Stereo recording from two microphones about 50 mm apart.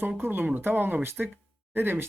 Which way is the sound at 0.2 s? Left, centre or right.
Right.